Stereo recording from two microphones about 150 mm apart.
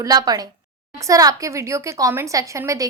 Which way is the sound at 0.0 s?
25° right (ahead or behind).